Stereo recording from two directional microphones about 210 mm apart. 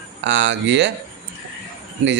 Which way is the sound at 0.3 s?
60° right (ahead or behind).